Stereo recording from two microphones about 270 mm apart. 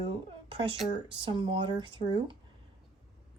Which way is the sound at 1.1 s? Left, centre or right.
Centre.